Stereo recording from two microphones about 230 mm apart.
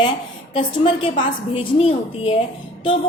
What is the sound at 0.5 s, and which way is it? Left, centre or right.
A woman's voice, left.